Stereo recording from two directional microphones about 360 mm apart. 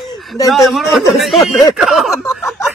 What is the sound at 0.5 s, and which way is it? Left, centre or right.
Speech, centre.